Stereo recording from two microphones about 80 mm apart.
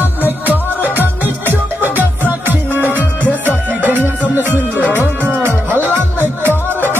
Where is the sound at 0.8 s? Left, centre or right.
Right.